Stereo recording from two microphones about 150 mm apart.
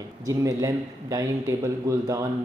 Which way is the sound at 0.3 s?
20° right (ahead or behind).